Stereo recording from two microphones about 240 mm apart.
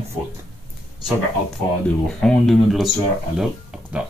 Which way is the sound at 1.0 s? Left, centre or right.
Centre.